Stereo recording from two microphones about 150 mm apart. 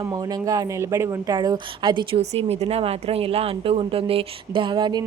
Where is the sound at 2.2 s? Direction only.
45° right (ahead or behind).